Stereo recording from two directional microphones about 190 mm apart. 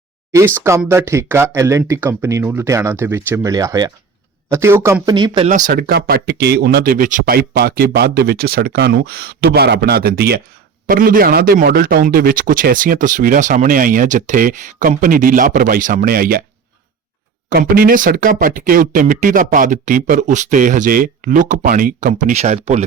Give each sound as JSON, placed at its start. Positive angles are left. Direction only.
{"t": 0.3, "sound": "speech", "side_deg": -15}
{"t": 5.5, "sound": "a man's voice", "side_deg": -45}
{"t": 17.5, "sound": "a man's voice", "side_deg": -50}